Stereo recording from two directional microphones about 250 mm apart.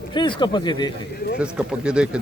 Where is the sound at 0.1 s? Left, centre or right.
Centre.